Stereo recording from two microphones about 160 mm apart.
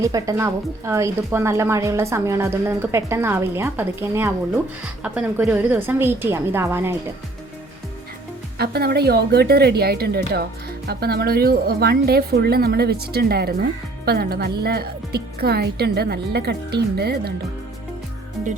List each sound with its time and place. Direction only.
0.0 s a woman's voice: 20° right (ahead or behind)
8.5 s a woman's voice: 80° right